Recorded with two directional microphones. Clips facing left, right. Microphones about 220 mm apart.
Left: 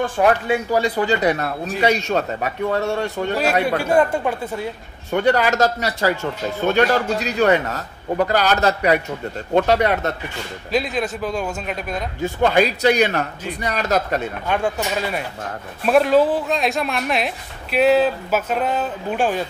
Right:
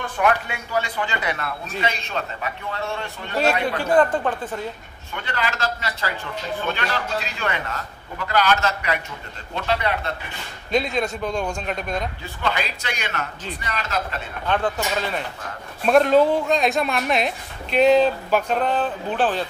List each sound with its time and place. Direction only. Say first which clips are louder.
0.2 s a man's voice: left 4 dB; 35° left (ahead or behind)
3.6 s speech: left 1 dB; 10° left (ahead or behind)
5.1 s a man's voice: left 11 dB; 45° left (ahead or behind)
10.7 s speech: even; centre (ahead or behind)
12.2 s speech: left 10 dB; 50° left (ahead or behind)
14.5 s speech: left 1 dB; 10° left (ahead or behind)